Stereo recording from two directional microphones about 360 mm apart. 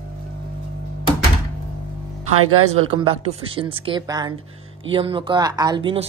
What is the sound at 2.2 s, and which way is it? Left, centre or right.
Speech, right.